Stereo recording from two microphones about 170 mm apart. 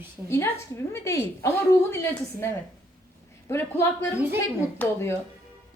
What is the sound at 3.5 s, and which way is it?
Speech, 15° left (ahead or behind).